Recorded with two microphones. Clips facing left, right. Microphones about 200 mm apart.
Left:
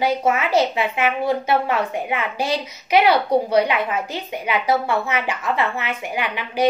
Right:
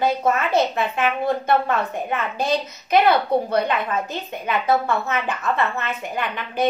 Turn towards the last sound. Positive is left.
turn(degrees=10)  # may be behind; listen again after turning